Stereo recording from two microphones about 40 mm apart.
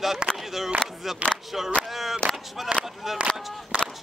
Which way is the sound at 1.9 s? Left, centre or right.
Centre.